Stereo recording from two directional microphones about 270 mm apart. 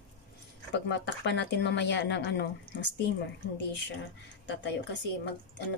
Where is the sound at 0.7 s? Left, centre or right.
Left.